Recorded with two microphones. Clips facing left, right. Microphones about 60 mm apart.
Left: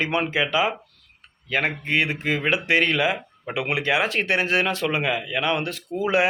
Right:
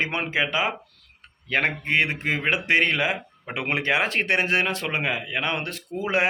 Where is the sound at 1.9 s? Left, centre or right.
Right.